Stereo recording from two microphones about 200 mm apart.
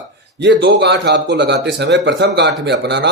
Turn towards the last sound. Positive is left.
turn(degrees=-60)  # may be behind; listen again after turning